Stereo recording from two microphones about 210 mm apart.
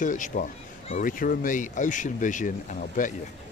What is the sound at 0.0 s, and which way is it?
Speech, 40° left (ahead or behind).